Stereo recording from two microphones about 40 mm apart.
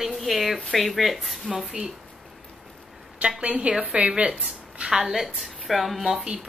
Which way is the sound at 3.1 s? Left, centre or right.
Right.